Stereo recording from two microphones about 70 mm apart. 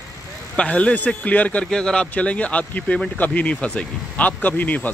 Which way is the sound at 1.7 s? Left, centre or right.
Centre.